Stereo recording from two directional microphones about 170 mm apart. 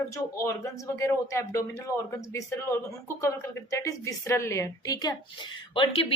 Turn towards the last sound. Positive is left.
turn(degrees=30)  # may be behind; listen again after turning